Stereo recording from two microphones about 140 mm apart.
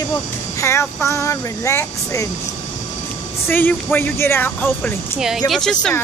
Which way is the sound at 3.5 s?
15° left (ahead or behind).